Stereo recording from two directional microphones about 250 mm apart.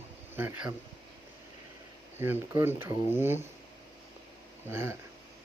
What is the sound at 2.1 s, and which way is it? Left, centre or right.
Speech, centre.